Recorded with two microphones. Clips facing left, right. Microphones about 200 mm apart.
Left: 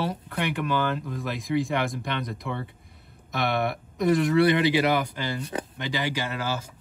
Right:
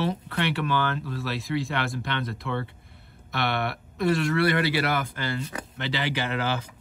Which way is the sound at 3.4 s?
65° right (ahead or behind).